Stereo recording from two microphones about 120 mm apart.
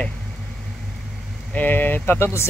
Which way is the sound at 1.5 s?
15° left (ahead or behind).